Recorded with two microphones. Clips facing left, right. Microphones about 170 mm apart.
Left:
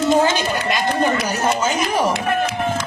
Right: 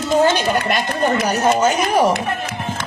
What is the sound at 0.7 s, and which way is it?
Speech, 55° right (ahead or behind).